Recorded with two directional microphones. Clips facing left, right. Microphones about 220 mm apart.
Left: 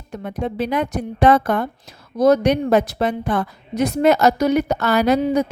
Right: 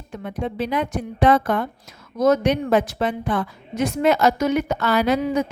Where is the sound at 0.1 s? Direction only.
40° left (ahead or behind).